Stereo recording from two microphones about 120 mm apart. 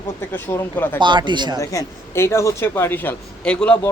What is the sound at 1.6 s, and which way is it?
Speech, 25° left (ahead or behind).